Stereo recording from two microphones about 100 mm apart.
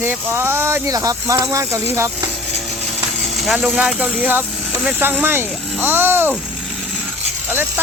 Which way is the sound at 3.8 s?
10° right (ahead or behind).